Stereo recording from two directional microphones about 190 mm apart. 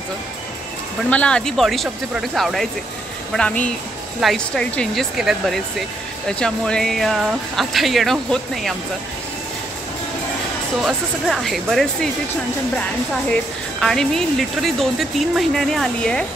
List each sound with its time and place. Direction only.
1.1 s speech: 5° left (ahead or behind)
10.8 s speech: centre (ahead or behind)